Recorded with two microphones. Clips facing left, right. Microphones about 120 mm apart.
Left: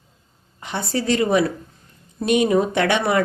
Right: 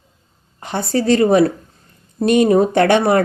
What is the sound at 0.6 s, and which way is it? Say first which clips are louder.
A woman's voice: right 6 dB; 40° right (ahead or behind).